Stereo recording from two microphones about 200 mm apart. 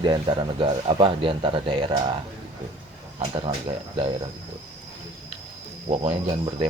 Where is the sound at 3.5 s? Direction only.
15° right (ahead or behind).